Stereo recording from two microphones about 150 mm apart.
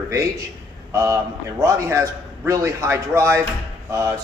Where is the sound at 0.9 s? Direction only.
20° right (ahead or behind).